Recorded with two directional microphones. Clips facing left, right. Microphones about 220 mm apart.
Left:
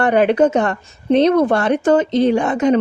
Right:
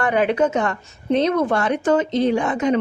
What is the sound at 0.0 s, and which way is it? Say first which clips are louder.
Speech: left 5 dB; 35° left (ahead or behind).